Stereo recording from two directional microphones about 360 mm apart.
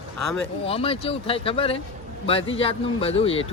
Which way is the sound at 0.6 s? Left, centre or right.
Centre.